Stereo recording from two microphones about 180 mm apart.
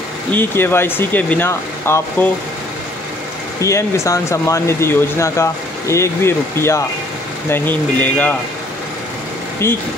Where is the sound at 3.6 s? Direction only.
15° left (ahead or behind).